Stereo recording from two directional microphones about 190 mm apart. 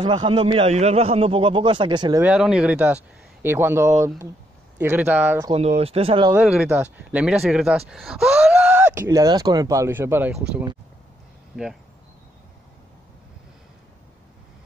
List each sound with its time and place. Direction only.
0.0 s a man's voice: 25° right (ahead or behind)
2.2 s speech: 5° right (ahead or behind)
5.5 s speech: 35° right (ahead or behind)
6.3 s speech: 5° right (ahead or behind)